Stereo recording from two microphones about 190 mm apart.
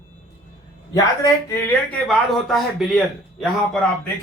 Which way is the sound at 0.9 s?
20° left (ahead or behind).